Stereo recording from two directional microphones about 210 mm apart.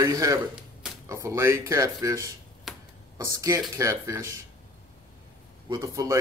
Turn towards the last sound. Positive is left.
turn(degrees=-15)  # may be behind; listen again after turning